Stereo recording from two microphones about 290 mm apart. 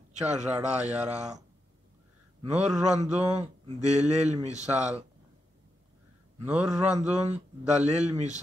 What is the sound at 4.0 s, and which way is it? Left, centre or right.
Speech, right.